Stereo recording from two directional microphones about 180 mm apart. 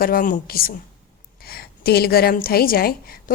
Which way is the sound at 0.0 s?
50° left (ahead or behind).